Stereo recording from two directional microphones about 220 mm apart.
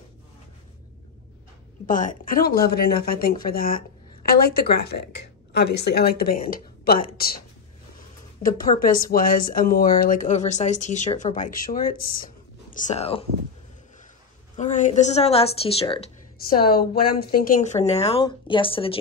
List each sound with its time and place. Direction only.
1.9 s speech: 35° left (ahead or behind)
14.6 s speech: 35° left (ahead or behind)
16.4 s speech: 45° left (ahead or behind)
17.7 s speech: 30° left (ahead or behind)